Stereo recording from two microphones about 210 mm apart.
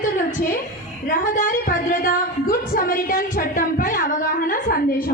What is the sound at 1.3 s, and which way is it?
A woman's voice, 40° left (ahead or behind).